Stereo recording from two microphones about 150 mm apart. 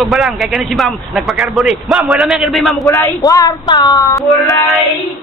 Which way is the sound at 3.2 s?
25° left (ahead or behind).